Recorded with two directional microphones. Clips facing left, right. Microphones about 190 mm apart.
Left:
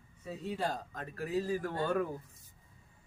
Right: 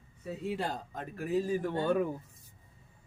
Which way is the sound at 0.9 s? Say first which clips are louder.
Right 3 dB; 20° right (ahead or behind).